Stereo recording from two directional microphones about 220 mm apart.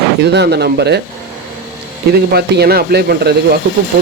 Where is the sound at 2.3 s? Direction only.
45° right (ahead or behind).